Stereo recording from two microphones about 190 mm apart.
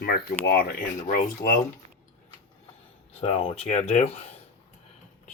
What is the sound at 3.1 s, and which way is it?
Speech, 30° left (ahead or behind).